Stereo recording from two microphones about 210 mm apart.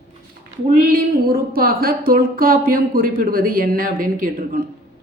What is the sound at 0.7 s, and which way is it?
A woman's voice, 40° right (ahead or behind).